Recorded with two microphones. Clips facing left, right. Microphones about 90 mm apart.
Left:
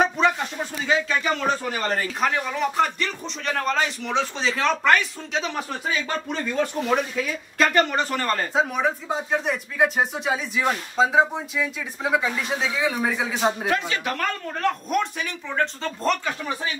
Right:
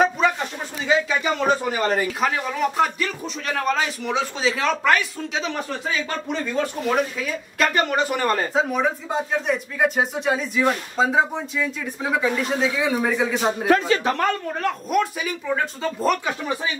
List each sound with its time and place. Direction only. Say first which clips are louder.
0.0 s a sound: right 1 dB; centre (ahead or behind)
2.1 s speech: right 1 dB; 5° right (ahead or behind)
8.5 s speech: right 1 dB; centre (ahead or behind)
13.7 s speech: right 6 dB; 40° right (ahead or behind)
14.5 s speech: right 1 dB; 5° right (ahead or behind)